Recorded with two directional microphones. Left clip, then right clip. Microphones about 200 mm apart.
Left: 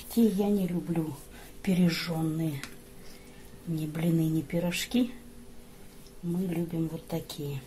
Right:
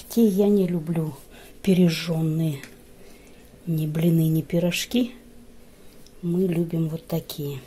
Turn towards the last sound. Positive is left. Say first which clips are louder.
# right 6 dB
turn(degrees=-50)  # may be behind; listen again after turning